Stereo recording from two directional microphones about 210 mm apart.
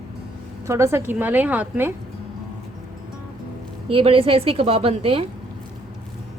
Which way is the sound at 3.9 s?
25° right (ahead or behind).